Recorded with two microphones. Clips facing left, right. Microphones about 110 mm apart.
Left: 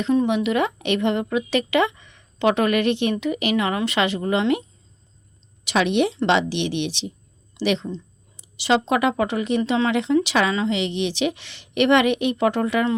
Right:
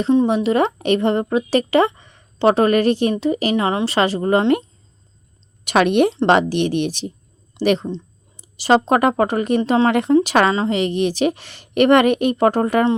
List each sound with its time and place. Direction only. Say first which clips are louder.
0.0 s a woman's voice: right 4 dB; 30° right (ahead or behind)
5.6 s a woman's voice: right 5 dB; 50° right (ahead or behind)